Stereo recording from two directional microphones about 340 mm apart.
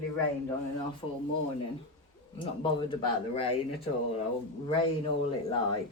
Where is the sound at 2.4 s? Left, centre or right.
Centre.